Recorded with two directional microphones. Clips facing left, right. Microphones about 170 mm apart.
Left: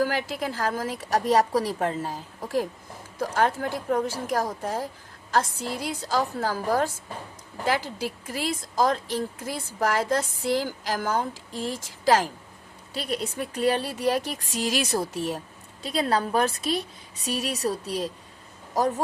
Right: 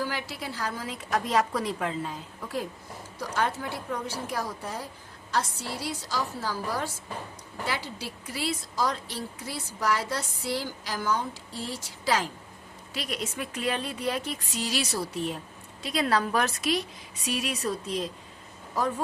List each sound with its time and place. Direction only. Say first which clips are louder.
0.0 s a woman's voice: left 7 dB; 50° left (ahead or behind)
12.9 s speech: left 4 dB; 35° left (ahead or behind)
16.0 s speech: left 2 dB; 30° left (ahead or behind)